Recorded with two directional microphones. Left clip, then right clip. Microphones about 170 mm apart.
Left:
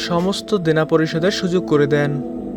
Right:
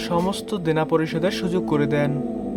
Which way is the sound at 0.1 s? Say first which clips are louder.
Left 4 dB; 20° left (ahead or behind).